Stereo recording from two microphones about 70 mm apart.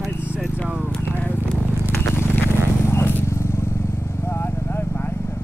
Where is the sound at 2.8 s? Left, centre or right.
Left.